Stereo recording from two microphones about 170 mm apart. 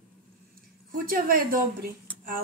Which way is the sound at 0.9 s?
55° right (ahead or behind).